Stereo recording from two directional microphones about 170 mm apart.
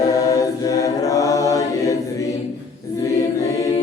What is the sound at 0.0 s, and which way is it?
A capella, 20° left (ahead or behind).